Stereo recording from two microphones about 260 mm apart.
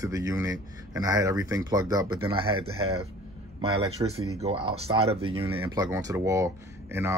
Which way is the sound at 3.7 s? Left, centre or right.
Right.